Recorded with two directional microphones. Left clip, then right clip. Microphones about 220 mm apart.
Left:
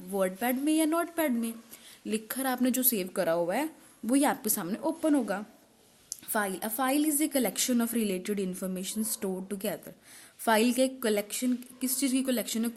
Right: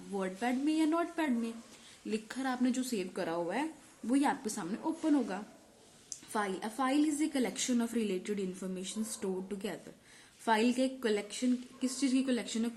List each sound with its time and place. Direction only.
0.2 s a woman's voice: 50° left (ahead or behind)